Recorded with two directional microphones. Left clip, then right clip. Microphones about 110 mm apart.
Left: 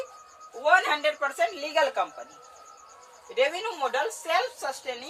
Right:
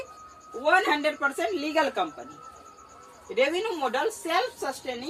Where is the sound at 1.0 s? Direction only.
40° left (ahead or behind).